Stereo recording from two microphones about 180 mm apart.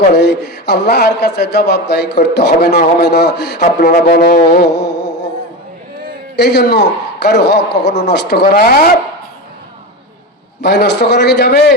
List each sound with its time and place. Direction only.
0.1 s a man's voice: 70° left (ahead or behind)
3.8 s music: 55° left (ahead or behind); by 5.3 s 75° left (ahead or behind)
6.3 s a man's voice: 70° left (ahead or behind)
10.6 s a man's voice: 70° left (ahead or behind)